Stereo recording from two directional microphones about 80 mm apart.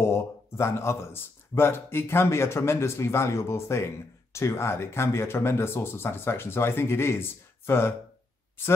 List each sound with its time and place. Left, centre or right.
0.0 s speech: left